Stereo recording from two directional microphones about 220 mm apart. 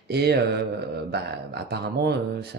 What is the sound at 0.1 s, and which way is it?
Speech, 45° right (ahead or behind).